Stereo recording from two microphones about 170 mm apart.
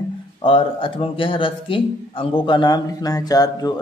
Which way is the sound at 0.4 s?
30° left (ahead or behind).